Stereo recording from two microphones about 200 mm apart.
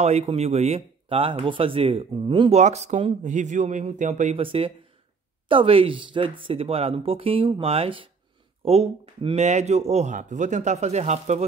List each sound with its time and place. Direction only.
0.0 s speech: 30° right (ahead or behind)
2.6 s speech: 35° right (ahead or behind)